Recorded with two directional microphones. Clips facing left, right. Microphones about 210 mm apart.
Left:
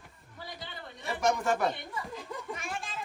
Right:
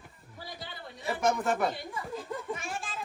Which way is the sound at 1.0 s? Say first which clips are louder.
Right 1 dB; centre (ahead or behind).